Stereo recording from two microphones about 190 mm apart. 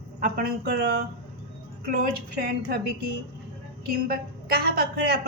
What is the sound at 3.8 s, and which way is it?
A woman's voice, 55° right (ahead or behind).